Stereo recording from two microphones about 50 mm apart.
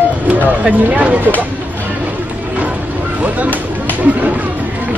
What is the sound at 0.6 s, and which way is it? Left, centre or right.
Speech, right.